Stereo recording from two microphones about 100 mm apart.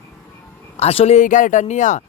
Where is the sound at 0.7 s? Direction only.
90° left.